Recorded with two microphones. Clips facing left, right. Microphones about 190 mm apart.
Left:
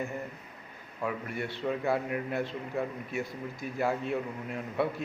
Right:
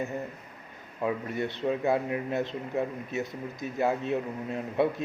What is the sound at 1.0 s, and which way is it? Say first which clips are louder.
A man's voice: right 4 dB; 20° right (ahead or behind).